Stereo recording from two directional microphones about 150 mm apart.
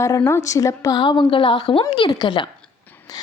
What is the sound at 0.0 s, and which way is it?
A woman's voice, 20° left (ahead or behind).